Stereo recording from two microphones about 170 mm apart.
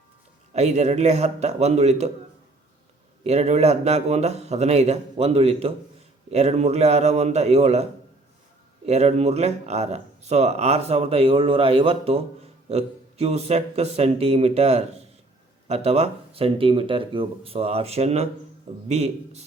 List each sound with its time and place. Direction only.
0.5 s speech: 40° right (ahead or behind)
3.2 s speech: 40° right (ahead or behind)
8.9 s speech: 40° right (ahead or behind)